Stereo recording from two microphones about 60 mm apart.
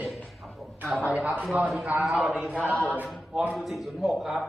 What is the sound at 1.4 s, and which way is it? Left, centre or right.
A man's voice, centre.